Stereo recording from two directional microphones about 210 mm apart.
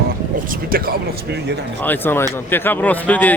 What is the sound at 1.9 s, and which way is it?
Speech, 10° left (ahead or behind).